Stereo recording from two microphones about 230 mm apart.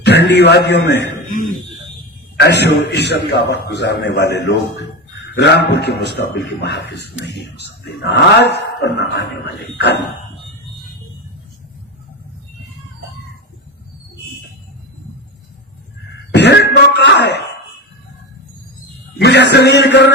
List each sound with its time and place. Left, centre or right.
0.0 s a man's voice: left
2.4 s a man's voice: left
16.3 s cough: left
19.2 s a man's voice: left